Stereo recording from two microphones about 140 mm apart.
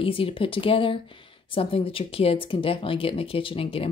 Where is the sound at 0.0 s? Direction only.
40° left (ahead or behind).